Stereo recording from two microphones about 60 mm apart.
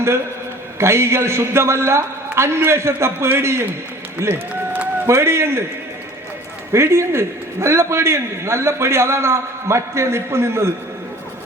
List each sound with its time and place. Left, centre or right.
0.8 s a man's voice: right
4.2 s run: right
5.2 s a man's voice: right
6.7 s a man's voice: right